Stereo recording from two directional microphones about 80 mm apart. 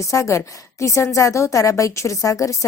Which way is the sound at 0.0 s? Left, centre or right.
Left.